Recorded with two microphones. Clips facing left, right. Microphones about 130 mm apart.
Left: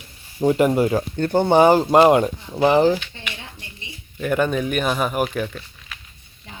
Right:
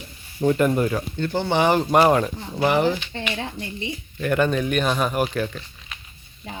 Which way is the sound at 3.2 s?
30° right (ahead or behind).